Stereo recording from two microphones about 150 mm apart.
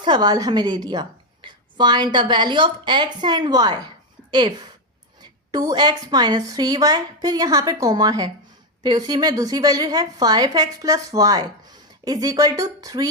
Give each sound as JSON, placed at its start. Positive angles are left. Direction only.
{"t": 0.0, "sound": "a woman's voice", "side_deg": -30}